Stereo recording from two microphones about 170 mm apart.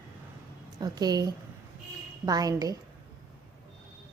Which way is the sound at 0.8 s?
25° right (ahead or behind).